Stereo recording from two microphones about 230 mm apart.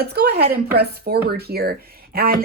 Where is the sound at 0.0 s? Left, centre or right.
Right.